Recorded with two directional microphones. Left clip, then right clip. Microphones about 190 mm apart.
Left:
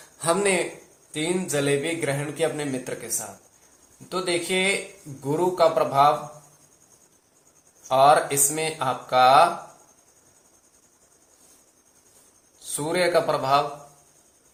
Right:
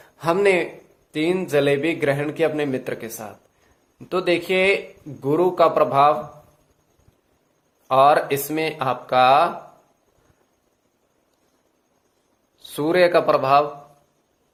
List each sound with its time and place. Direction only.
0.2 s a man's voice: 40° right (ahead or behind)
7.9 s a man's voice: 55° right (ahead or behind)
12.6 s speech: 55° right (ahead or behind)